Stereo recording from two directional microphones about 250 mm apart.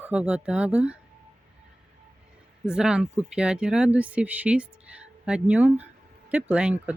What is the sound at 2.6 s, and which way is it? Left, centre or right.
Speech, centre.